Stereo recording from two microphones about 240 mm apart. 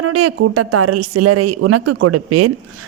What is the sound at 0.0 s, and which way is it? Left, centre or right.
Speech, right.